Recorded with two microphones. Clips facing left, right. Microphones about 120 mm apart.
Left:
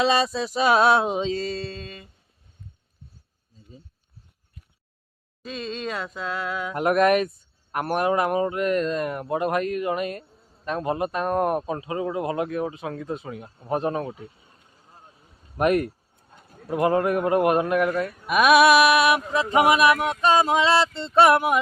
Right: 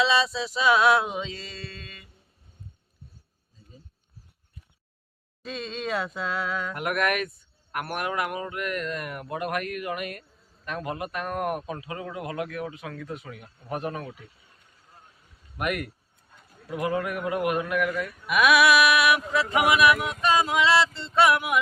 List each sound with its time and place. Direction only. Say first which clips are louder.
0.0 s music: left 2 dB; 50° left (ahead or behind)
0.9 s speech: left 3 dB; 30° left (ahead or behind)
5.4 s a sound: left 2 dB; centre (ahead or behind)
6.7 s a man's voice: left 9 dB; 30° left (ahead or behind)
21.2 s speech: left 4 dB; 40° left (ahead or behind)